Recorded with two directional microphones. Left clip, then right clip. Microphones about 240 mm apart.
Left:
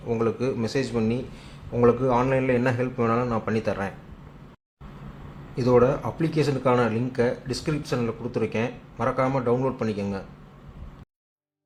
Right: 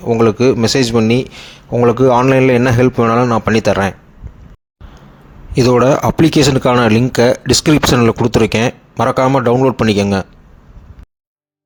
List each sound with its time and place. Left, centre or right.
0.0 s speech: right
5.5 s speech: right